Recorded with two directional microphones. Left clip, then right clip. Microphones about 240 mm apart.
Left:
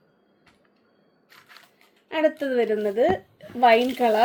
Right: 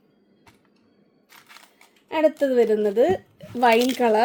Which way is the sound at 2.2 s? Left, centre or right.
Right.